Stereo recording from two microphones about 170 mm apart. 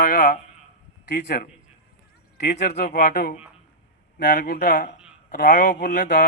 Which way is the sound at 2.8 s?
60° left (ahead or behind).